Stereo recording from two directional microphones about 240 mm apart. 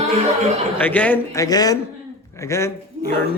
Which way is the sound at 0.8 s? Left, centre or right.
Centre.